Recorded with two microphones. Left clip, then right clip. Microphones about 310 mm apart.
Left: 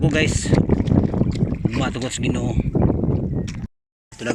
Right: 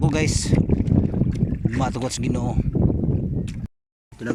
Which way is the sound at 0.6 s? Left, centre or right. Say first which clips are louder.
Left 3 dB; left.